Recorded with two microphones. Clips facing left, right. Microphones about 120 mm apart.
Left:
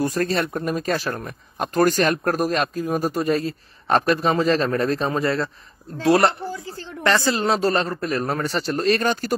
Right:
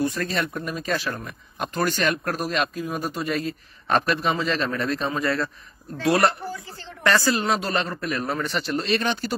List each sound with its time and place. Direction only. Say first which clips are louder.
0.0 s a man's voice: left 3 dB; 45° left (ahead or behind)